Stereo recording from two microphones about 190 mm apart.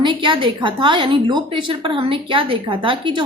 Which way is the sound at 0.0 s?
25° right (ahead or behind).